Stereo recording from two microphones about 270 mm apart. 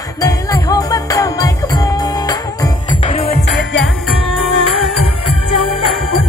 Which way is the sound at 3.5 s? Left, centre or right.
Left.